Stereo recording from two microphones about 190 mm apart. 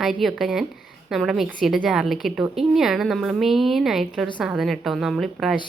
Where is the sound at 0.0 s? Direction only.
Centre (ahead or behind).